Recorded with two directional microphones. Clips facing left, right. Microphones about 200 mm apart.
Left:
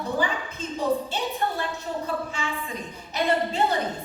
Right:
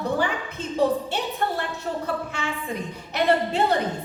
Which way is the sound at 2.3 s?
65° right (ahead or behind).